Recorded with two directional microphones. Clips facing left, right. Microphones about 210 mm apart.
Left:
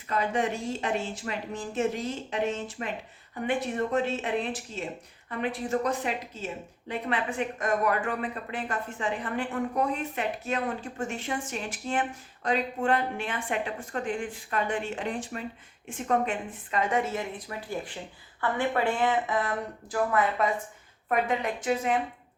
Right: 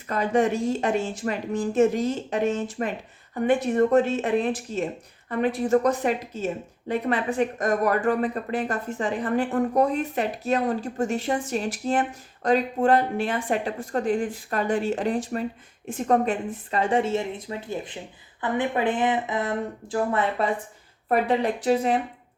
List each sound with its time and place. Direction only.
0.1 s a woman's voice: 45° right (ahead or behind)